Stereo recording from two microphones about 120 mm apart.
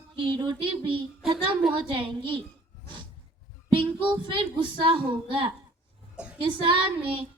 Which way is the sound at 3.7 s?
45° right (ahead or behind).